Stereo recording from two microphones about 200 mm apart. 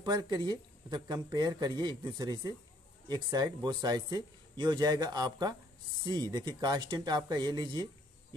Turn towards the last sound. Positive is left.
turn(degrees=-20)  # may be behind; listen again after turning